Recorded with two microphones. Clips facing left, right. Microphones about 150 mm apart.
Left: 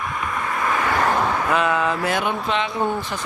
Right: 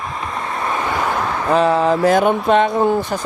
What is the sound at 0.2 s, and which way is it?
Vehicle, 30° right (ahead or behind).